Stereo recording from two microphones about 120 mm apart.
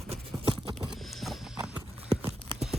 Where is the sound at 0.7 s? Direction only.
Centre (ahead or behind).